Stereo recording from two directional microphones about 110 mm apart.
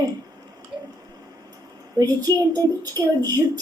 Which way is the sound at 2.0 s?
35° right (ahead or behind).